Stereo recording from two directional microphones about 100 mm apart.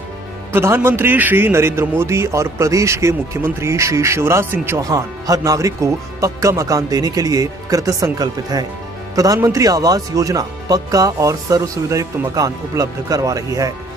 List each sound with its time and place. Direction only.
0.5 s a man's voice: 25° right (ahead or behind)